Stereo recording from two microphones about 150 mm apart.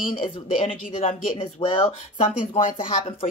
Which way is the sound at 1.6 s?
20° left (ahead or behind).